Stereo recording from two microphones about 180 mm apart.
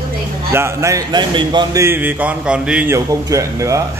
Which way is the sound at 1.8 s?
10° right (ahead or behind).